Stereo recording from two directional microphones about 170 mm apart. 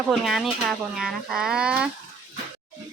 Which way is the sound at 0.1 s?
Centre (ahead or behind).